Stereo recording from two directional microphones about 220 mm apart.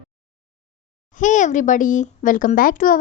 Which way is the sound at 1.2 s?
35° left (ahead or behind).